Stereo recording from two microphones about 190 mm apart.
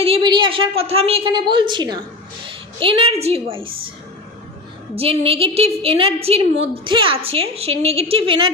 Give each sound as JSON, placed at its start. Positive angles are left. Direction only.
{"t": 0.0, "sound": "a woman's voice", "side_deg": -25}
{"t": 4.9, "sound": "a woman's voice", "side_deg": -30}